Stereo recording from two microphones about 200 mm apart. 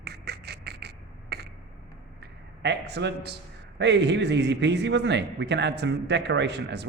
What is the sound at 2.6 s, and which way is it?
A man's voice, 60° right (ahead or behind).